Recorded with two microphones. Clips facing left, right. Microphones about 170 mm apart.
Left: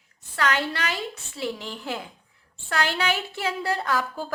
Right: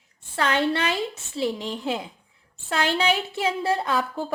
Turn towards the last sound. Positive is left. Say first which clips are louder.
# right 2 dB
turn(degrees=-20)  # may be behind; listen again after turning